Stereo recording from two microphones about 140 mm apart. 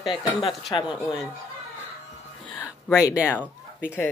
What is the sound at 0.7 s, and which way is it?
Speech, 30° left (ahead or behind).